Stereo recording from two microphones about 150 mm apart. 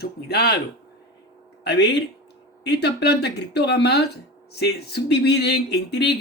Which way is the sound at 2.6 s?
90° left.